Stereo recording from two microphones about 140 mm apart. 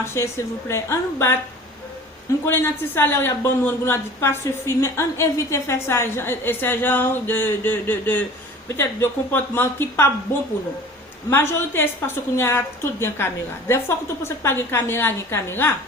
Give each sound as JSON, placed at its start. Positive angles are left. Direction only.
{"t": 0.0, "sound": "a woman's voice", "side_deg": 20}
{"t": 2.5, "sound": "a woman's voice", "side_deg": 15}